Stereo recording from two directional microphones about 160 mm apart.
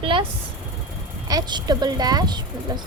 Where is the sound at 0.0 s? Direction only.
35° right (ahead or behind).